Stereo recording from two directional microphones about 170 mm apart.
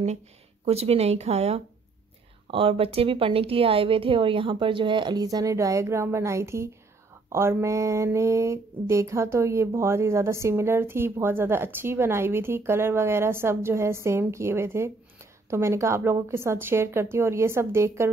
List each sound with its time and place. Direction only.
0.7 s a woman's voice: 35° right (ahead or behind); by 18.1 s 15° right (ahead or behind)